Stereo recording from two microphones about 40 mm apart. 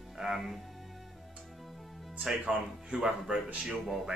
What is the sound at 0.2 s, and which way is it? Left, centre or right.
Speech, centre.